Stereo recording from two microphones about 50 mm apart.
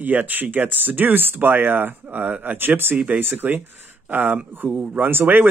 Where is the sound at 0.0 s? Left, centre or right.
Right.